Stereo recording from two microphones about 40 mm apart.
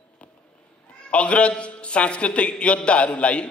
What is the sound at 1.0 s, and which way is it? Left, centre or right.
A man's voice, left.